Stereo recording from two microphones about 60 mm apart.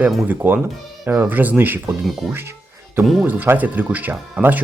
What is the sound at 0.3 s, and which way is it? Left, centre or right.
Speech, right.